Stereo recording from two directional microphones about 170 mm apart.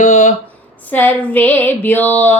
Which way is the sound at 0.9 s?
10° left (ahead or behind).